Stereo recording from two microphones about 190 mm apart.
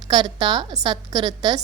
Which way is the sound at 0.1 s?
20° right (ahead or behind).